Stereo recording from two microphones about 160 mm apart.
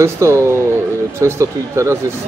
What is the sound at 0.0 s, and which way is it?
Speech, 15° right (ahead or behind).